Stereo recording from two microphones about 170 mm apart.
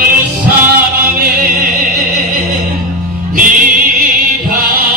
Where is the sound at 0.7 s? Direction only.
60° right (ahead or behind).